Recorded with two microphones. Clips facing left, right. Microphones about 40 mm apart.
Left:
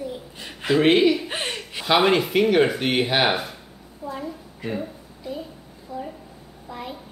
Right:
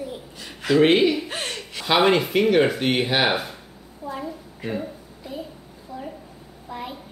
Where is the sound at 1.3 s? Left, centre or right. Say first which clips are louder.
Left 1 dB; centre.